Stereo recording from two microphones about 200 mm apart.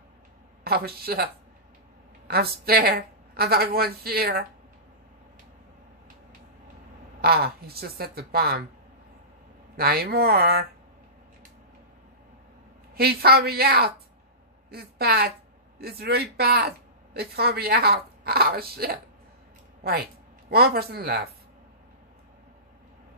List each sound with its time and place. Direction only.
0.7 s a woman's voice: 50° right (ahead or behind)
2.2 s a woman's voice: 50° right (ahead or behind)
7.2 s a woman's voice: 50° right (ahead or behind)
9.8 s a woman's voice: 50° right (ahead or behind)
12.9 s a woman's voice: 50° right (ahead or behind)